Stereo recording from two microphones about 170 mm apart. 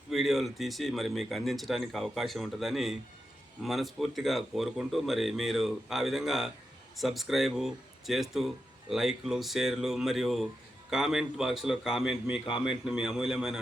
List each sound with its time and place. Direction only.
0.1 s speech: centre (ahead or behind)